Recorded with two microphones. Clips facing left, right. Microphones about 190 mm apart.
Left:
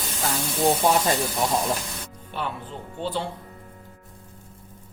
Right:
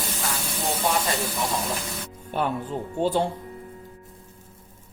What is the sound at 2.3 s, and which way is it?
Speech, 45° right (ahead or behind).